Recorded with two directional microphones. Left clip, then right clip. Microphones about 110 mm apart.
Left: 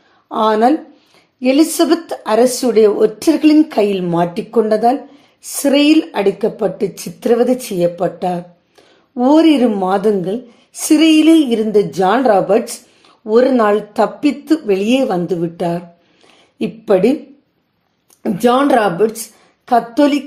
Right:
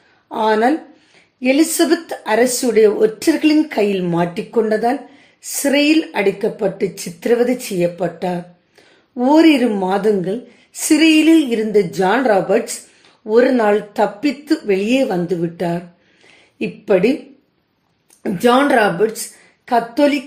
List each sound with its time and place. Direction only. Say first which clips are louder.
0.3 s speech: left 3 dB; 25° left (ahead or behind)
18.2 s speech: left 1 dB; 25° left (ahead or behind)